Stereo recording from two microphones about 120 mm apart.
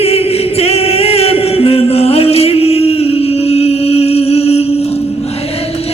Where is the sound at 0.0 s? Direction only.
55° left (ahead or behind).